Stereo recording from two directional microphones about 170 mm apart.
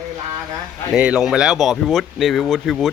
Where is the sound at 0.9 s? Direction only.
5° right (ahead or behind).